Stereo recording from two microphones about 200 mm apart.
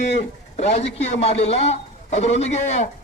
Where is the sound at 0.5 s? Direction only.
35° left (ahead or behind).